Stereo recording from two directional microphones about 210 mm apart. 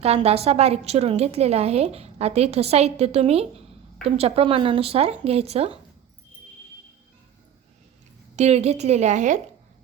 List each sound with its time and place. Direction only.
0.0 s a woman's voice: 30° right (ahead or behind)
8.4 s a woman's voice: 30° right (ahead or behind)